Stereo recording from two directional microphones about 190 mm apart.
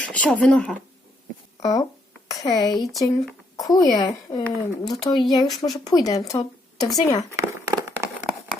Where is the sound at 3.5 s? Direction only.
20° left (ahead or behind).